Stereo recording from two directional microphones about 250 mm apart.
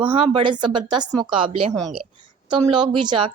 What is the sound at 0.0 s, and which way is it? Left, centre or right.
A woman's voice, right.